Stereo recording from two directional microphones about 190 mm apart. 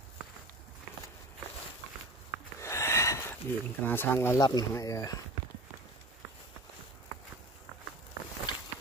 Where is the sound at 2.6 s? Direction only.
15° left (ahead or behind).